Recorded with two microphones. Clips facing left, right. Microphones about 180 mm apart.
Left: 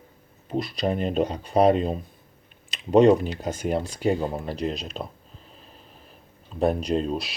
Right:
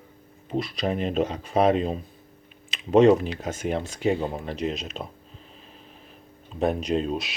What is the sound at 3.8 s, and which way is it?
Speech, 35° left (ahead or behind).